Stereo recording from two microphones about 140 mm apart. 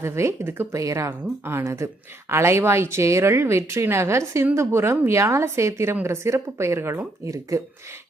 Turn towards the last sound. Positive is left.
turn(degrees=-25)  # may be behind; listen again after turning